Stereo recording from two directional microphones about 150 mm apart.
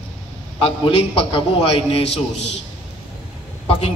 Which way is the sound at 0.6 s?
40° left (ahead or behind).